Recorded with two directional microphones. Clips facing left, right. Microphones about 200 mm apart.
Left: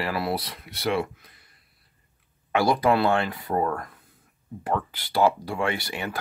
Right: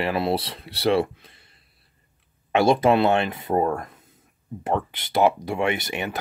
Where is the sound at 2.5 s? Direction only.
25° right (ahead or behind).